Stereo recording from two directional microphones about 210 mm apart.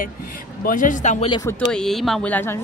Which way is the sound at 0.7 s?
40° left (ahead or behind).